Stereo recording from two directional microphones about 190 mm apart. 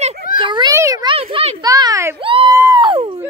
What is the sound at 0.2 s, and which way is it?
Children playing, 50° left (ahead or behind).